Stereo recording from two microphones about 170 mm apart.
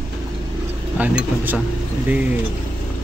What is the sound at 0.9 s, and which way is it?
Speech, 10° right (ahead or behind).